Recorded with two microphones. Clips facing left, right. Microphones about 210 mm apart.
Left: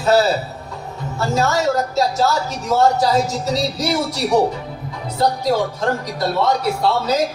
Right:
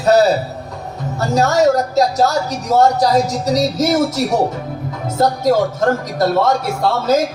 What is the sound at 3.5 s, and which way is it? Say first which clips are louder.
Speech: right 6 dB; 45° right (ahead or behind).